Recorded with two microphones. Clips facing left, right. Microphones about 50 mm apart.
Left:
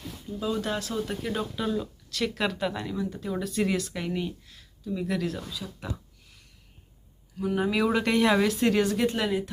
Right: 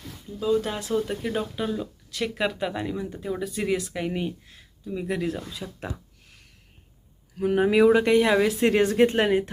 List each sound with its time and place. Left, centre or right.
0.8 s speech: centre
3.3 s speech: centre
5.5 s speech: right
7.3 s speech: right
7.7 s speech: right
7.9 s speech: centre
8.5 s speech: right